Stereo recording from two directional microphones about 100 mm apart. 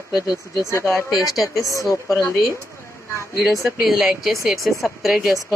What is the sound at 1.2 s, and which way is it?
Speech, centre (ahead or behind).